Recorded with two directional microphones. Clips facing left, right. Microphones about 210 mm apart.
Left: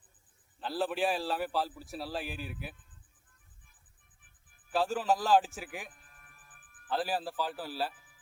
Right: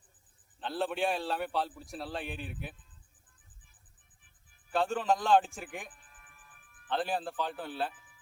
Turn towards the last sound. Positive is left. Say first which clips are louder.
# even
turn(degrees=5)  # may be behind; listen again after turning